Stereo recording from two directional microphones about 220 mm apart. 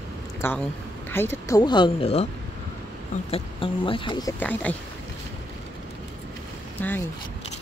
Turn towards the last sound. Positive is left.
turn(degrees=10)  # may be behind; listen again after turning